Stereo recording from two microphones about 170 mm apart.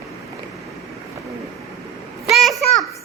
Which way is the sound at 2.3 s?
Centre (ahead or behind).